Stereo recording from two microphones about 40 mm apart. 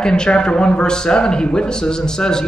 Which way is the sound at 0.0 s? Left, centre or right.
Left.